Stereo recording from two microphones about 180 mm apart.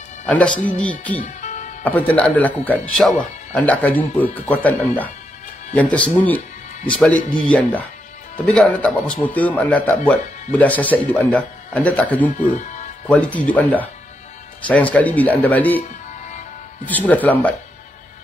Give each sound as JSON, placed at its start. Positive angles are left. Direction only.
{"t": 0.3, "sound": "speech", "side_deg": 5}
{"t": 1.4, "sound": "music", "side_deg": 40}
{"t": 1.9, "sound": "speech", "side_deg": 10}
{"t": 12.3, "sound": "speech", "side_deg": 45}
{"t": 13.1, "sound": "speech", "side_deg": 5}
{"t": 16.8, "sound": "speech", "side_deg": 10}